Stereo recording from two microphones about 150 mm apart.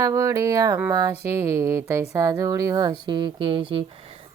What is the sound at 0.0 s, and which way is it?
A woman's voice, 20° right (ahead or behind).